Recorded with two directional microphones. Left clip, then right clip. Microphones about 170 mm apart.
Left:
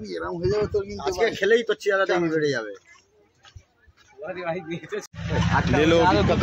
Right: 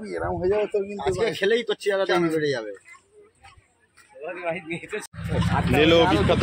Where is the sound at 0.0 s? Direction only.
35° left (ahead or behind).